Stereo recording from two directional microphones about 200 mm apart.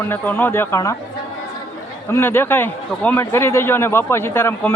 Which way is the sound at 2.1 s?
10° left (ahead or behind).